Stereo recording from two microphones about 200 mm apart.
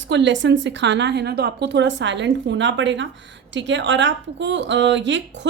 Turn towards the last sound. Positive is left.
turn(degrees=-60)  # may be behind; listen again after turning